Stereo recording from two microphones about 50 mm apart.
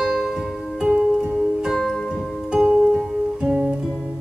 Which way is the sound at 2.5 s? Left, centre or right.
Centre.